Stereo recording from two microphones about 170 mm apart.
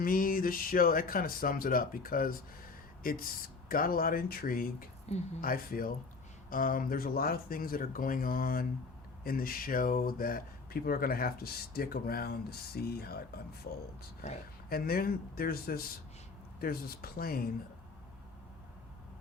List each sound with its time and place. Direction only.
0.0 s speech: 55° left (ahead or behind)
14.7 s speech: 60° left (ahead or behind)